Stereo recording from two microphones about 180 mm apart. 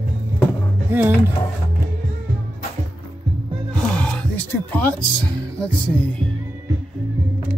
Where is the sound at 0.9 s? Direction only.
10° right (ahead or behind).